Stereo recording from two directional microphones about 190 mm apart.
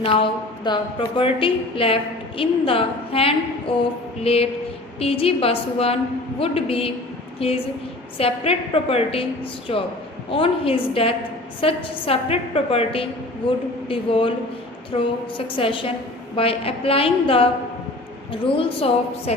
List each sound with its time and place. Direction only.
0.0 s a woman's voice: 25° left (ahead or behind)
10.3 s a woman's voice: 30° left (ahead or behind)
15.5 s a woman's voice: 25° left (ahead or behind)